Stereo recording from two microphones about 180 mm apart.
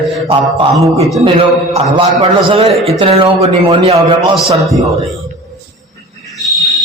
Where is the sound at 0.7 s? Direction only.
Centre (ahead or behind).